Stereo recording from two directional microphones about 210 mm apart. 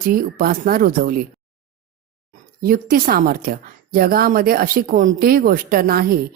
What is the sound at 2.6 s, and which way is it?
A woman's voice, 45° right (ahead or behind).